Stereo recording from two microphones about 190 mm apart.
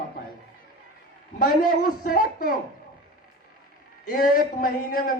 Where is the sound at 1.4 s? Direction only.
50° left (ahead or behind).